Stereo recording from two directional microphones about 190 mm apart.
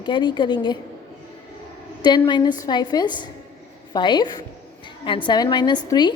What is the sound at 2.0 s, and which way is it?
A woman's voice, 25° left (ahead or behind).